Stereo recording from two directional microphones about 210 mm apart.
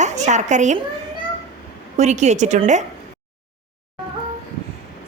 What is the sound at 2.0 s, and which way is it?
Speech, 35° right (ahead or behind).